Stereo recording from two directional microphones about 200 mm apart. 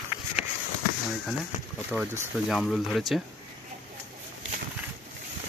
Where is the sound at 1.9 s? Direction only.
10° right (ahead or behind).